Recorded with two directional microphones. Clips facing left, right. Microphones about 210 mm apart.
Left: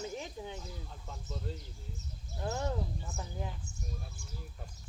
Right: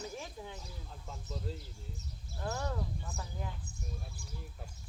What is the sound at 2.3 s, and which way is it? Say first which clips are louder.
Speech: left 2 dB; 20° left (ahead or behind).